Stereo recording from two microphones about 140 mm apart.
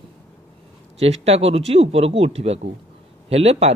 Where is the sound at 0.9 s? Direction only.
50° right (ahead or behind).